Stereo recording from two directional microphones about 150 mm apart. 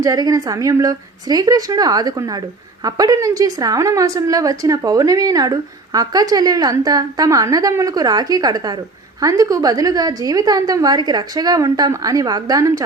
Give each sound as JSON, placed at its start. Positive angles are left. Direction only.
{"t": 0.0, "sound": "a woman's voice", "side_deg": -25}